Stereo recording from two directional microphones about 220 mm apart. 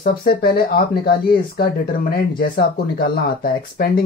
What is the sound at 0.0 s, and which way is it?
Speech, 40° left (ahead or behind).